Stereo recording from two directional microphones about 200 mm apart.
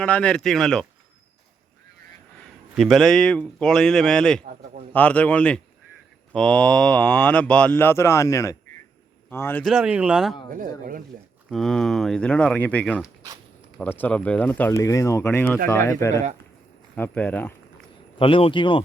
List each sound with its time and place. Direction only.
0.0 s speech: 5° left (ahead or behind)
2.7 s speech: centre (ahead or behind)
9.6 s speech: 5° right (ahead or behind)
10.5 s speech: 45° right (ahead or behind)
11.4 s speech: centre (ahead or behind)
18.2 s speech: 25° left (ahead or behind)